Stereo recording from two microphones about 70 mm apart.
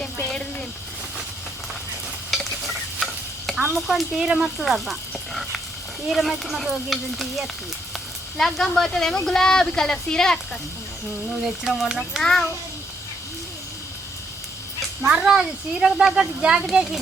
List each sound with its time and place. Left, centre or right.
2.3 s stir: centre
3.7 s a woman's voice: centre
11.6 s speech: centre
12.2 s a woman's voice: centre
15.0 s speech: centre